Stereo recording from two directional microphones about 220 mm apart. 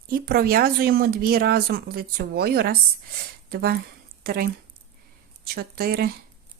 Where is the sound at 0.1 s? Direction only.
45° right (ahead or behind).